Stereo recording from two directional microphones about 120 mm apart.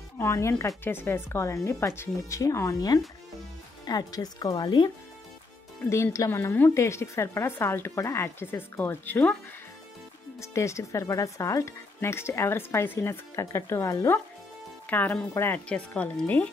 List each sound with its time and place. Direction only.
0.2 s speech: 25° left (ahead or behind)
5.9 s speech: 25° left (ahead or behind)
10.4 s speech: 25° left (ahead or behind)